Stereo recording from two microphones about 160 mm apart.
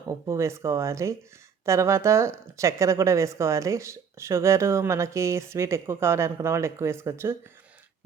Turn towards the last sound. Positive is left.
turn(degrees=-15)  # may be behind; listen again after turning